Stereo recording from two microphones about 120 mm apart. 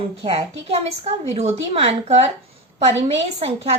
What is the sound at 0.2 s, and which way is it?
A woman's voice, 50° right (ahead or behind).